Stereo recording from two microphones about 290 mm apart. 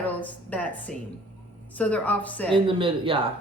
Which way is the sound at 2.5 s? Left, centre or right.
Centre.